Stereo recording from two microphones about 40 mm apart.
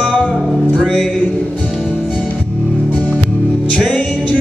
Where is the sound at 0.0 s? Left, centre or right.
Left.